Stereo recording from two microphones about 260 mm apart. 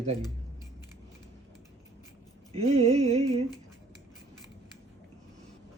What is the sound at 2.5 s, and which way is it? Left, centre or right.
Speech, right.